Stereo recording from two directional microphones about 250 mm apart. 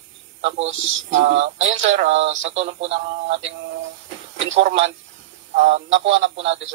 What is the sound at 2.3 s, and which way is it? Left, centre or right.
Speech, right.